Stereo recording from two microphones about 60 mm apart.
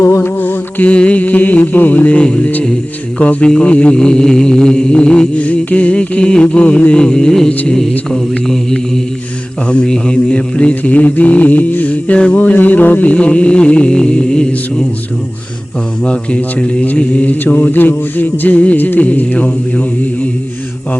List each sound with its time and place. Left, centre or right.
0.0 s mantra: left
0.3 s music: left
0.9 s mantra: left
16.0 s mantra: centre